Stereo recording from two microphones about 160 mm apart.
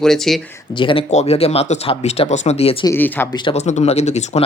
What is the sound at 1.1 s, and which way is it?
Speech, 40° left (ahead or behind).